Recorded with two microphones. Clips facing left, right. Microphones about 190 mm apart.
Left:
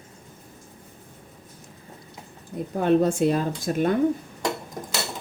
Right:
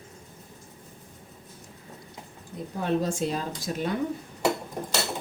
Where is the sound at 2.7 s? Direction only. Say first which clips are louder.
Left 7 dB; 60° left (ahead or behind).